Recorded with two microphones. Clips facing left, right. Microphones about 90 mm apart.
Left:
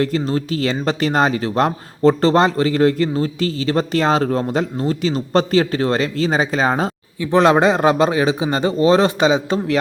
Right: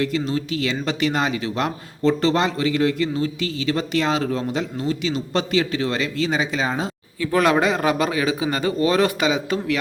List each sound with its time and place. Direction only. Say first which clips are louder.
0.0 s speech: left 3 dB; 40° left (ahead or behind)
7.2 s a man's voice: left 5 dB; 25° left (ahead or behind)